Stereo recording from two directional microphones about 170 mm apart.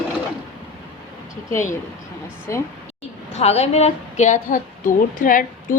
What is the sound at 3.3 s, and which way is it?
A woman's voice, 40° left (ahead or behind).